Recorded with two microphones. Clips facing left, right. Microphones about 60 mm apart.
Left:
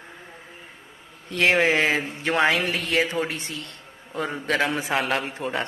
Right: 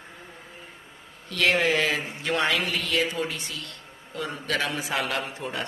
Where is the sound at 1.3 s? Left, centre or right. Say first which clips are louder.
Left 3 dB; left.